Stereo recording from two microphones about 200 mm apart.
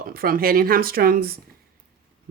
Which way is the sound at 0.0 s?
45° right (ahead or behind).